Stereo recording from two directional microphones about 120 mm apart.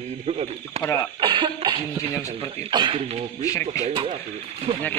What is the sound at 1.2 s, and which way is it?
Cough, 40° right (ahead or behind).